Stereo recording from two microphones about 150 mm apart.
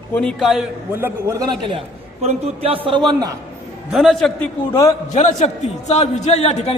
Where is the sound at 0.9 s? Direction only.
15° right (ahead or behind).